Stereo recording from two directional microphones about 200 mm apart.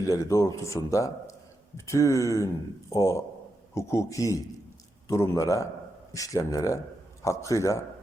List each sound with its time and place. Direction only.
0.1 s a man's voice: 15° left (ahead or behind)